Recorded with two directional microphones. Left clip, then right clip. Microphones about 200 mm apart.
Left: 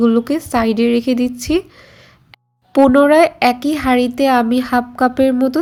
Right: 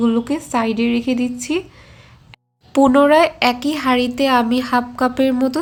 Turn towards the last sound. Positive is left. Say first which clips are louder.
# left 3 dB
turn(degrees=20)  # may be behind; listen again after turning